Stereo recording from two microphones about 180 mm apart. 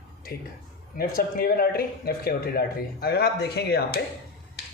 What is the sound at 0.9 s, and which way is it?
Speech, 55° left (ahead or behind).